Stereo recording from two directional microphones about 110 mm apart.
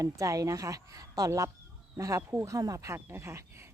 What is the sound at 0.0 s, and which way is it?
Speech, 30° right (ahead or behind).